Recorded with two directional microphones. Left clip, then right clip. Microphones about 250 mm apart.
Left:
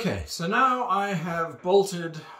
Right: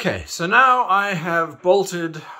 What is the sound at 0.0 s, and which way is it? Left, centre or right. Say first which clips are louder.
A man's voice: right 7 dB; centre.